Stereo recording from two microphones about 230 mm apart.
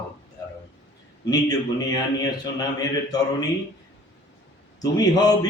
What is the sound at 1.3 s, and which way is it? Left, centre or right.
A man's voice, centre.